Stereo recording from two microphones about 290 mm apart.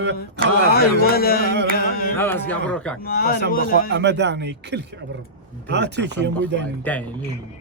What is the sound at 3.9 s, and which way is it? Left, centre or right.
Speech, right.